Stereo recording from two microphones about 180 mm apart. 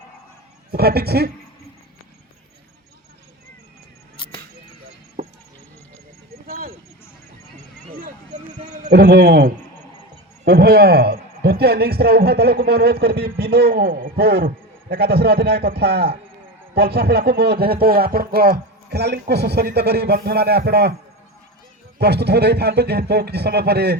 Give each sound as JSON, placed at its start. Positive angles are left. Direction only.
{"t": 0.7, "sound": "a man's voice", "side_deg": -60}
{"t": 5.2, "sound": "a sound", "side_deg": -50}
{"t": 7.9, "sound": "vehicle", "side_deg": -50}
{"t": 8.9, "sound": "a man's voice", "side_deg": -60}
{"t": 21.9, "sound": "a man's voice", "side_deg": -65}